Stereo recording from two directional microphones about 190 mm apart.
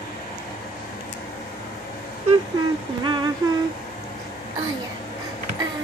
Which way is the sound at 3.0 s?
25° right (ahead or behind).